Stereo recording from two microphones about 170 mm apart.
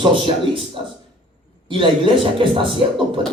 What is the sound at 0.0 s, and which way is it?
Speech, 30° right (ahead or behind).